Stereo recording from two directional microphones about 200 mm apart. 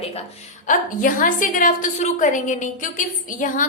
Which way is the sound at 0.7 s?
40° left (ahead or behind).